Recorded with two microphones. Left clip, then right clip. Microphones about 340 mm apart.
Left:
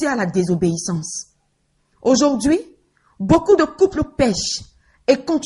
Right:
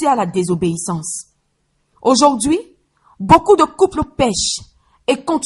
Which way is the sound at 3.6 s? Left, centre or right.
Centre.